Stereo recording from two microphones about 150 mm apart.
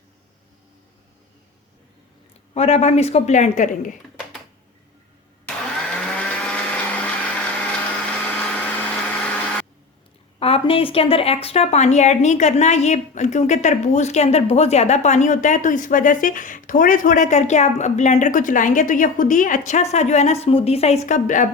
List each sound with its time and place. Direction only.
2.6 s a woman's voice: 45° left (ahead or behind)
5.9 s blender: 10° left (ahead or behind)
10.4 s a woman's voice: 40° left (ahead or behind); by 21.5 s 60° left (ahead or behind)